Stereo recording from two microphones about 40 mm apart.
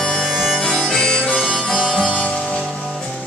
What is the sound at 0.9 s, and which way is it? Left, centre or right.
Harmonica, centre.